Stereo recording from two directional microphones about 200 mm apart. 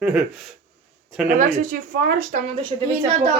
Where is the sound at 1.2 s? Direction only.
40° right (ahead or behind).